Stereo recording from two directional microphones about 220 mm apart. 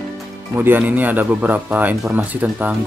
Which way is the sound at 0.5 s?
10° right (ahead or behind).